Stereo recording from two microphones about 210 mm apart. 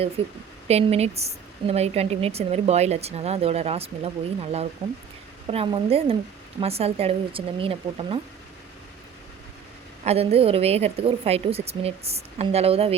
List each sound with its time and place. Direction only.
0.2 s speech: 25° right (ahead or behind)
10.0 s speech: 30° right (ahead or behind)